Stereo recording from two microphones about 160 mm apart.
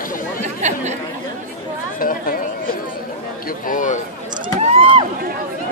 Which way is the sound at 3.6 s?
55° left (ahead or behind).